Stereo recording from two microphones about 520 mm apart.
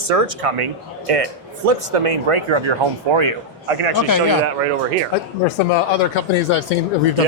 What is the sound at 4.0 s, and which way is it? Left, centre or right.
Speech, left.